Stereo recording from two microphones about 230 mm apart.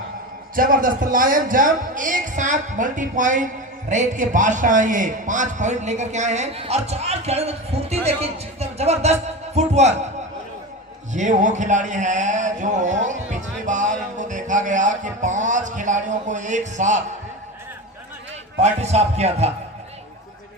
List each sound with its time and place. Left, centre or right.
0.5 s a man's voice: right
11.1 s a man's voice: right
18.6 s a man's voice: right